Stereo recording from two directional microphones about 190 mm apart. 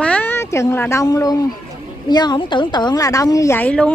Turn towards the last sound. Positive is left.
turn(degrees=5)  # may be behind; listen again after turning